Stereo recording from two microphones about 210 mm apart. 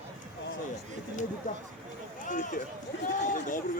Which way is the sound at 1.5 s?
35° left (ahead or behind).